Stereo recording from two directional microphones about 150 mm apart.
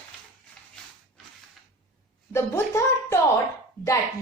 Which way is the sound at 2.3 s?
20° left (ahead or behind).